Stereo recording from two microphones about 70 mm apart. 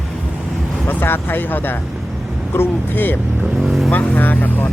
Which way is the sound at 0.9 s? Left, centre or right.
Left.